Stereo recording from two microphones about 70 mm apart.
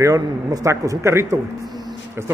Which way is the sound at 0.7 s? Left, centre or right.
Right.